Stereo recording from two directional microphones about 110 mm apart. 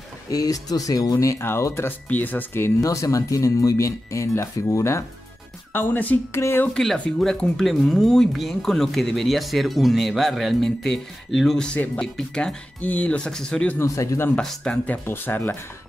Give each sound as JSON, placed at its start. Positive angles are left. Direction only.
{"t": 0.3, "sound": "speech", "side_deg": 35}
{"t": 6.7, "sound": "speech", "side_deg": 5}
{"t": 13.7, "sound": "speech", "side_deg": 25}
{"t": 14.3, "sound": "speech", "side_deg": 5}
{"t": 15.0, "sound": "speech", "side_deg": 20}